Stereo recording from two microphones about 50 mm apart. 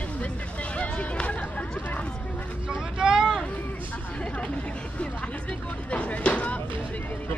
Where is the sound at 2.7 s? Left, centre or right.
Centre.